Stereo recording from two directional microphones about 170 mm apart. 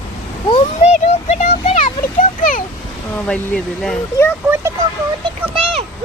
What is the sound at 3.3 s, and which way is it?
Speech, 5° left (ahead or behind).